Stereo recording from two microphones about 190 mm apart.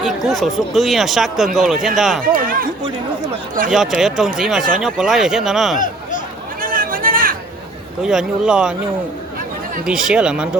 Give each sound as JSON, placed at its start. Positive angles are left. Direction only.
{"t": 0.0, "sound": "speech", "side_deg": 0}
{"t": 2.2, "sound": "speech", "side_deg": -50}
{"t": 3.7, "sound": "speech", "side_deg": 0}
{"t": 5.8, "sound": "a sound", "side_deg": 45}
{"t": 6.6, "sound": "a sound", "side_deg": -45}
{"t": 8.0, "sound": "speech", "side_deg": -5}
{"t": 9.8, "sound": "speech", "side_deg": -5}